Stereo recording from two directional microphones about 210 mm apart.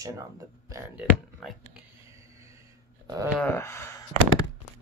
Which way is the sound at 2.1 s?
15° right (ahead or behind).